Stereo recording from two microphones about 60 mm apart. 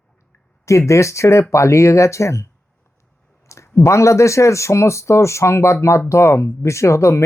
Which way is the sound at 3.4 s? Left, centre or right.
Left.